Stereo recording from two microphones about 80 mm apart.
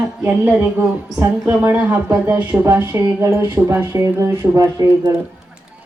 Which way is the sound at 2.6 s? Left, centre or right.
Right.